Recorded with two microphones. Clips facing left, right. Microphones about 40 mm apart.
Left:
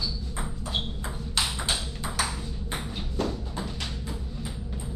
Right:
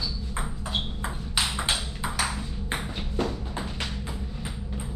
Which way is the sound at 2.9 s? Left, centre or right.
Right.